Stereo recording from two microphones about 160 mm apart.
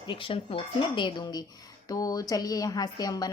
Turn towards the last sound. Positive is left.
turn(degrees=25)  # may be behind; listen again after turning